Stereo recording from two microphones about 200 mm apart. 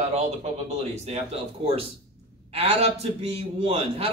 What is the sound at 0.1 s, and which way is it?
A man's voice, 35° right (ahead or behind).